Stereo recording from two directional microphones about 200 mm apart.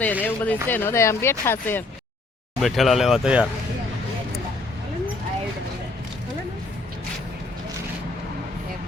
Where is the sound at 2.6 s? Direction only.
Centre (ahead or behind).